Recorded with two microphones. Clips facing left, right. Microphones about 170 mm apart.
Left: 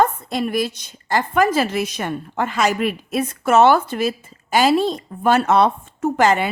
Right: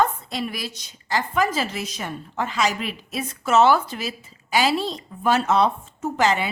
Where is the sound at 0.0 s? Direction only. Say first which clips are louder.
Left 4 dB; 50° left (ahead or behind).